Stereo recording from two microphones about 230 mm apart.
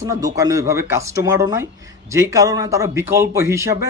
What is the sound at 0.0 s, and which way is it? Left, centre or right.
Speech, centre.